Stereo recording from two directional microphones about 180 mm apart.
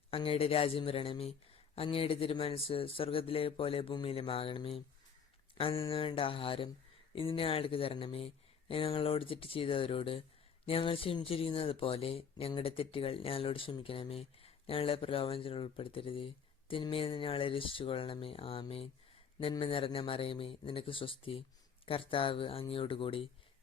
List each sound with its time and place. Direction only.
0.1 s speech: 30° left (ahead or behind)